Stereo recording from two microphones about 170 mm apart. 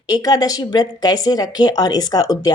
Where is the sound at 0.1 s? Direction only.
20° left (ahead or behind).